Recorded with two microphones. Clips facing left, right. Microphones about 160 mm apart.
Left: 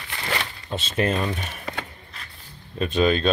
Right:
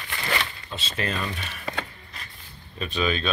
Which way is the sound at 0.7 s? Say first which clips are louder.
Left 7 dB; 50° left (ahead or behind).